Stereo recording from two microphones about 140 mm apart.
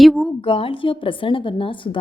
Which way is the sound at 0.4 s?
40° left (ahead or behind).